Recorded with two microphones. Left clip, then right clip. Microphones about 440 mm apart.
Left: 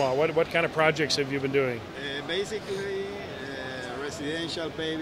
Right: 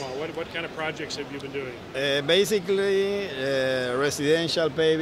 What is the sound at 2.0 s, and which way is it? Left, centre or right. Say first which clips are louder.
Speech: right 14 dB; right.